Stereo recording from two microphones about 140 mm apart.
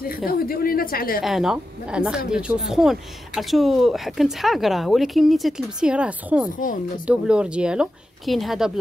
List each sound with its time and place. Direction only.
0.3 s a woman's voice: 90° left
1.2 s a woman's voice: centre (ahead or behind)